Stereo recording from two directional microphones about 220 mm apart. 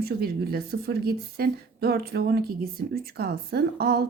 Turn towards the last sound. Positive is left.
turn(degrees=-45)  # may be behind; listen again after turning